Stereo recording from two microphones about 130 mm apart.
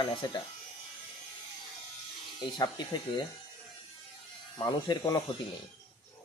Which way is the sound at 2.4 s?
35° left (ahead or behind).